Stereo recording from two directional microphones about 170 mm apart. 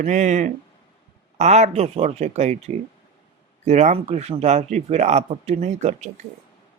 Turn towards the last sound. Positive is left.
turn(degrees=-40)  # may be behind; listen again after turning